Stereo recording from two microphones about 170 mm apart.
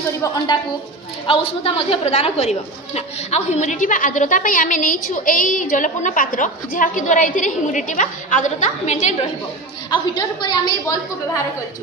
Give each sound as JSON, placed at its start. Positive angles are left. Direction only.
{"t": 1.2, "sound": "a woman's voice", "side_deg": 30}
{"t": 9.8, "sound": "a woman's voice", "side_deg": 25}